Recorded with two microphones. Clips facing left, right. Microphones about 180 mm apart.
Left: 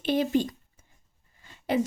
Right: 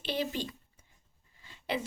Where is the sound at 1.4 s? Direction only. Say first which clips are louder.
Left 9 dB; 45° left (ahead or behind).